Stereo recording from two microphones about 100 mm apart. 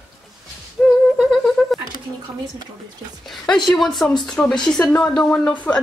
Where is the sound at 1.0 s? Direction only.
Centre (ahead or behind).